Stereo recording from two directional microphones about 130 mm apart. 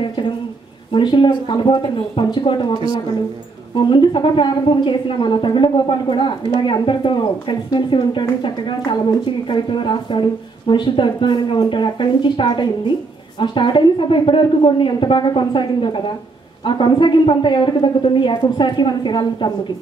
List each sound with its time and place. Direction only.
0.9 s a woman's voice: 40° left (ahead or behind)